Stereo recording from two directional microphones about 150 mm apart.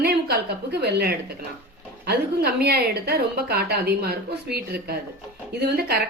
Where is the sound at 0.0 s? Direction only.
90° right.